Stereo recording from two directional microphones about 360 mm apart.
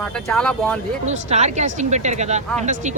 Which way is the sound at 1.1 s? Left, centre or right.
Centre.